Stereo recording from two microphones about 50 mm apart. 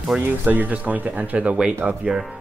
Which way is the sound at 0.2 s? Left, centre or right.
Right.